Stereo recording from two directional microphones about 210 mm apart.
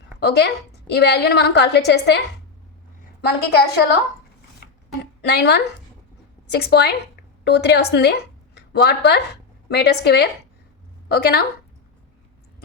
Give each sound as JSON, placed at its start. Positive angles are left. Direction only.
{"t": 0.2, "sound": "a woman's voice", "side_deg": 50}
{"t": 3.2, "sound": "a woman's voice", "side_deg": 50}
{"t": 5.2, "sound": "a woman's voice", "side_deg": 50}